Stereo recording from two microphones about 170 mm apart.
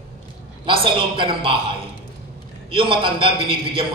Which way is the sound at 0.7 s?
30° right (ahead or behind).